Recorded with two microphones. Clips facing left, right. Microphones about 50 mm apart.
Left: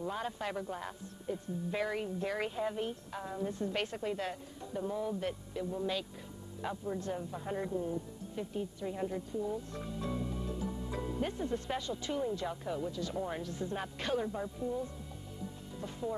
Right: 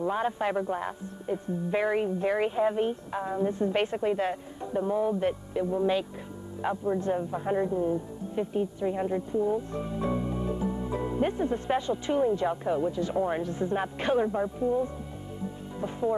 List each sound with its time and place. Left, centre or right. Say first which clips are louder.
0.0 s a woman's voice: right 10 dB; right